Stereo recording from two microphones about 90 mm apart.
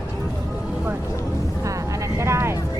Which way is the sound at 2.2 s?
30° right (ahead or behind).